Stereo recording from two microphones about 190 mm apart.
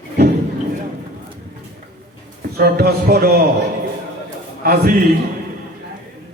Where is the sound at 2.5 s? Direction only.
55° right (ahead or behind).